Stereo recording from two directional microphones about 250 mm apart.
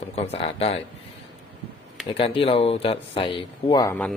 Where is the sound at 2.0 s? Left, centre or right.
Left.